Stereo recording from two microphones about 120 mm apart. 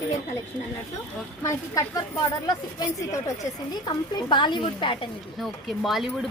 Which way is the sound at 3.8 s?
40° left (ahead or behind).